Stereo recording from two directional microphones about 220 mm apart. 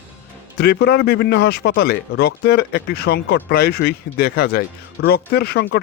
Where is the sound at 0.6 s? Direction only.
50° left (ahead or behind).